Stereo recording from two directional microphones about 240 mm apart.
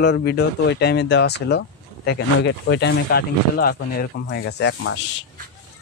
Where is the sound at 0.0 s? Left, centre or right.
Left.